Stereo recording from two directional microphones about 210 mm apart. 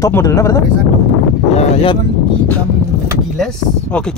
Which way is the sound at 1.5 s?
30° left (ahead or behind).